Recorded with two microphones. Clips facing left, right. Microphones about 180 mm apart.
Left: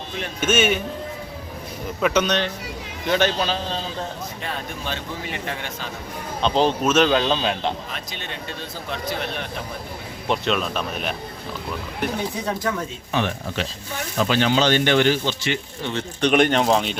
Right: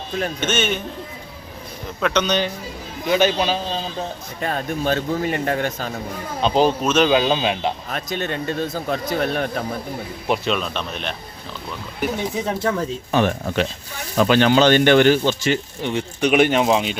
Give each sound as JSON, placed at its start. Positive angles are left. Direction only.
{"t": 0.3, "sound": "speech", "side_deg": 10}
{"t": 2.0, "sound": "speech", "side_deg": 5}
{"t": 4.4, "sound": "speech", "side_deg": -45}
{"t": 6.4, "sound": "speech", "side_deg": -10}
{"t": 6.8, "sound": "speech", "side_deg": 5}
{"t": 7.1, "sound": "speech", "side_deg": -10}
{"t": 7.9, "sound": "speech", "side_deg": -45}
{"t": 10.2, "sound": "speech", "side_deg": -5}
{"t": 12.3, "sound": "speech", "side_deg": -20}
{"t": 13.1, "sound": "speech", "side_deg": -45}
{"t": 14.2, "sound": "speech", "side_deg": -60}
{"t": 15.8, "sound": "speech", "side_deg": -15}